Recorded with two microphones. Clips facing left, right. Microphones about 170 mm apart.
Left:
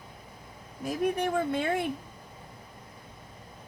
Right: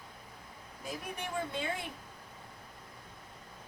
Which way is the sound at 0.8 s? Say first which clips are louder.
Left 13 dB; 55° left (ahead or behind).